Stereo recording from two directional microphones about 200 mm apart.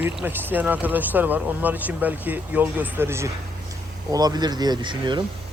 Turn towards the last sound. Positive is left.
turn(degrees=-25)  # may be behind; listen again after turning